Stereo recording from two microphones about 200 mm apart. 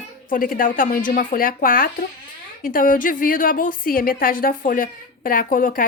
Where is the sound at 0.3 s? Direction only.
45° left (ahead or behind).